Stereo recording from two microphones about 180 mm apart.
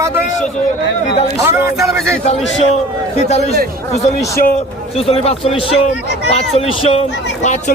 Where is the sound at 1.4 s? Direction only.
15° right (ahead or behind).